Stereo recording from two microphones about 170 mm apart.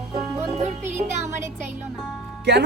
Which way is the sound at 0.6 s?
45° right (ahead or behind).